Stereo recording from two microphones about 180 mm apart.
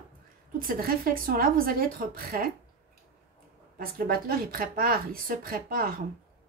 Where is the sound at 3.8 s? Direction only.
55° right (ahead or behind).